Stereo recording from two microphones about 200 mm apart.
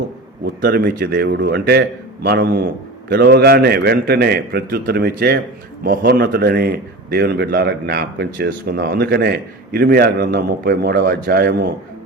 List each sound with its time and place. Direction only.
0.6 s a man's voice: 50° right (ahead or behind)